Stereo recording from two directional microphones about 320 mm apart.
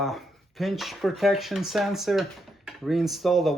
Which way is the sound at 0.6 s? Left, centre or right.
Centre.